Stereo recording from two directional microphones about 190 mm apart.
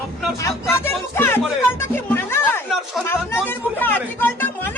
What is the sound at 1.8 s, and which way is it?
Music, 10° left (ahead or behind).